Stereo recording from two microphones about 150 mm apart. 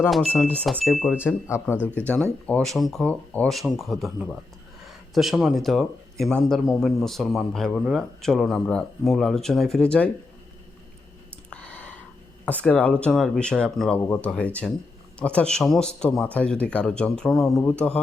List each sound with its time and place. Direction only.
0.1 s speech: centre (ahead or behind)
1.2 s speech: 15° left (ahead or behind)
1.7 s speech: 10° right (ahead or behind)
2.0 s speech: 10° left (ahead or behind)
11.5 s a sound: 10° left (ahead or behind)
12.5 s speech: 10° left (ahead or behind)